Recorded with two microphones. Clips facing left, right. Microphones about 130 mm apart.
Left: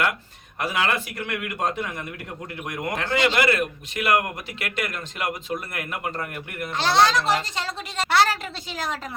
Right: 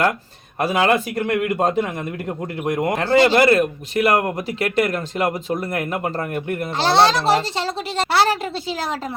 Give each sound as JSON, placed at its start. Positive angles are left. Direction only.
{"t": 0.6, "sound": "a man's voice", "side_deg": -35}